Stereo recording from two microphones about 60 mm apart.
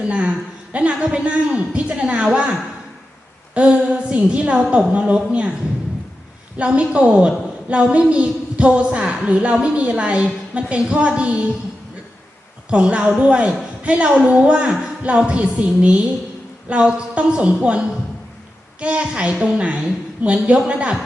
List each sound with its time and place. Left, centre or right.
0.0 s a woman's voice: centre
6.6 s a woman's voice: centre
12.7 s a woman's voice: centre